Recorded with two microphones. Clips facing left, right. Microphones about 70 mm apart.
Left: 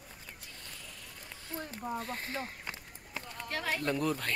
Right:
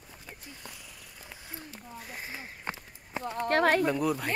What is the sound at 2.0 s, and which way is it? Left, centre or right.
Speech, centre.